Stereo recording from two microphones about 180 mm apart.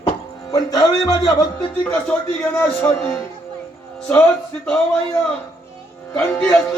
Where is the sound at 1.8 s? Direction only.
10° left (ahead or behind).